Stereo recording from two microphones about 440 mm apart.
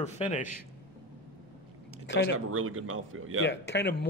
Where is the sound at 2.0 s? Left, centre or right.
Left.